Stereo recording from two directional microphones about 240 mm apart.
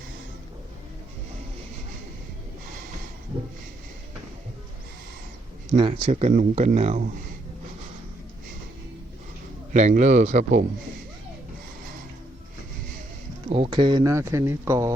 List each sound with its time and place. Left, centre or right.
5.7 s speech: right
9.7 s speech: right
13.5 s speech: right